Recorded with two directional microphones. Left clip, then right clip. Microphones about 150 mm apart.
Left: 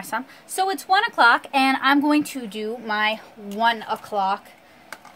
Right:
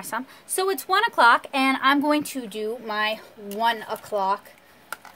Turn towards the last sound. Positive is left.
turn(degrees=-20)  # may be behind; listen again after turning